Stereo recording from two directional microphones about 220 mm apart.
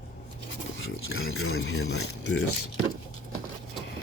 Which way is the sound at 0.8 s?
60° left (ahead or behind).